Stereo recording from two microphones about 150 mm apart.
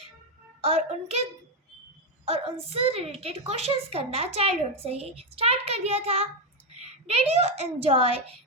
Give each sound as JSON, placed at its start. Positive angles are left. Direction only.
{"t": 0.6, "sound": "a woman's voice", "side_deg": -40}
{"t": 2.2, "sound": "a woman's voice", "side_deg": -40}